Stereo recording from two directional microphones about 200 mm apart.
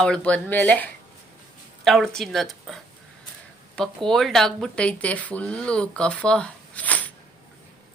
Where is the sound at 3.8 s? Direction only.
Centre (ahead or behind).